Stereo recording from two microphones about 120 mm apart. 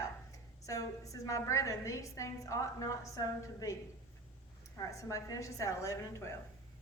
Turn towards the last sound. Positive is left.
turn(degrees=25)  # may be behind; listen again after turning